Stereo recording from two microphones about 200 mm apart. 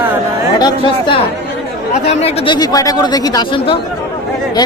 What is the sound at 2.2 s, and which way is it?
Speech, 25° left (ahead or behind).